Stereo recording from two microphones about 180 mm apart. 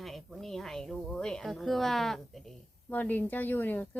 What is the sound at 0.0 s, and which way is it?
A woman's voice, centre (ahead or behind).